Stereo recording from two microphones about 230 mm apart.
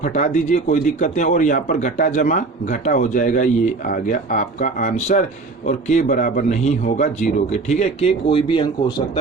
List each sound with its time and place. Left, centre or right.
0.0 s speech: left